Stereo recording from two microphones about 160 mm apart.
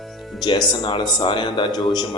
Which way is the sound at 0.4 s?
30° left (ahead or behind).